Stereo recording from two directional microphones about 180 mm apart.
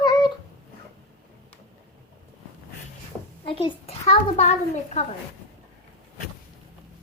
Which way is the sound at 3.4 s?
30° left (ahead or behind).